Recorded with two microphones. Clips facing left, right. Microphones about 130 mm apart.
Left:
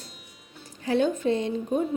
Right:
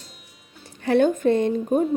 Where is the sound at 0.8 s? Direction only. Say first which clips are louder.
Right 5 dB; 60° right (ahead or behind).